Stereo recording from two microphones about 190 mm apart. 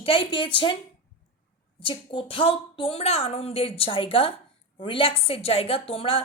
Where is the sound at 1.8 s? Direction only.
25° left (ahead or behind).